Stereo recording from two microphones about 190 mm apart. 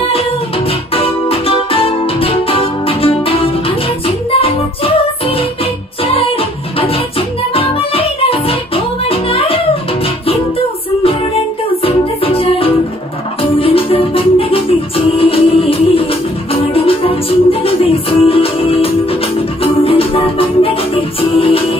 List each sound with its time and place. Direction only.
0.7 s music: 30° left (ahead or behind)
11.8 s music: 30° left (ahead or behind)